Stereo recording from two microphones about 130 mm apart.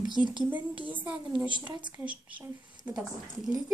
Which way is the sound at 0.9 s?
15° right (ahead or behind).